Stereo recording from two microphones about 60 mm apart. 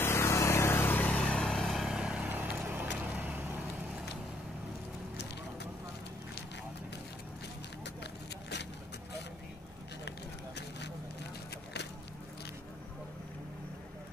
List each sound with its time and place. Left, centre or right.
0.0 s vehicle: left
0.9 s vehicle: left
1.2 s vehicle: centre
1.7 s vehicle: centre
2.0 s vehicle: centre
2.2 s vehicle: right
3.0 s vehicle: right